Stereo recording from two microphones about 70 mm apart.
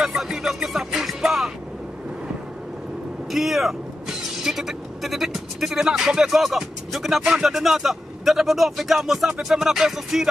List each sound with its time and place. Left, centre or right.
0.0 s music: centre
3.3 s speech: centre